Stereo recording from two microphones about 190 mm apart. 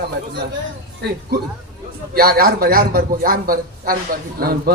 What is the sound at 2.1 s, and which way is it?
A man's voice, 50° right (ahead or behind).